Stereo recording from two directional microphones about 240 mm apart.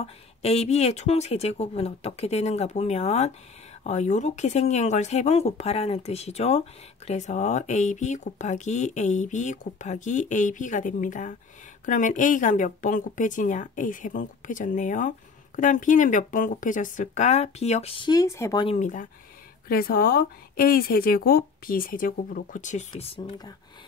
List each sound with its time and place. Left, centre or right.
0.0 s speech: left
18.8 s speech: left